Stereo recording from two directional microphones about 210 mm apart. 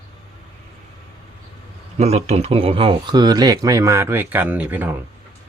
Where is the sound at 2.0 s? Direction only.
30° right (ahead or behind).